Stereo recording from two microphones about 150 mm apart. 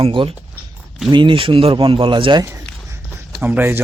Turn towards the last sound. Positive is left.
turn(degrees=-15)  # may be behind; listen again after turning